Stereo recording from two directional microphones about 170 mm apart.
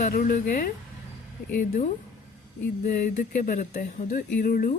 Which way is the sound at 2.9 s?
50° left (ahead or behind).